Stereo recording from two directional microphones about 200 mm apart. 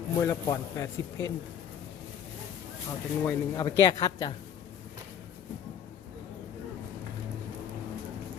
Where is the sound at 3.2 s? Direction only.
20° left (ahead or behind).